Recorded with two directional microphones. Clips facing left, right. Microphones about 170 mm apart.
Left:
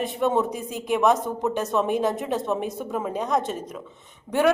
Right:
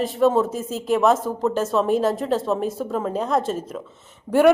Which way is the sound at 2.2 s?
15° left (ahead or behind).